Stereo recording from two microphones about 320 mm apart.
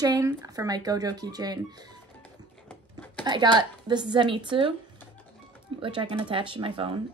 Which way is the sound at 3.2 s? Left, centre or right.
Centre.